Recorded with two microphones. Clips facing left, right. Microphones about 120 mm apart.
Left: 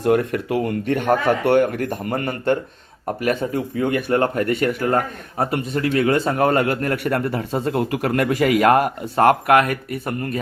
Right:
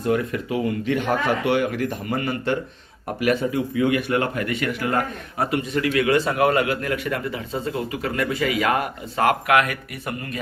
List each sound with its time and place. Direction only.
0.0 s speech: 55° left (ahead or behind)